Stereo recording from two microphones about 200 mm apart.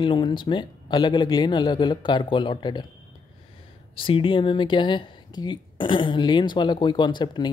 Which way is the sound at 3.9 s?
25° left (ahead or behind).